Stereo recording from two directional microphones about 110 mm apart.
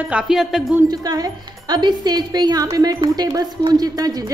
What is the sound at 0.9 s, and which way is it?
Speech, 35° right (ahead or behind).